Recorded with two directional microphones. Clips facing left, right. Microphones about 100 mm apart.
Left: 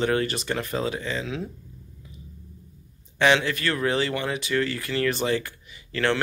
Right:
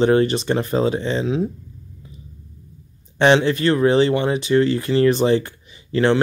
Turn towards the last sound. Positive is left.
turn(degrees=-25)  # may be behind; listen again after turning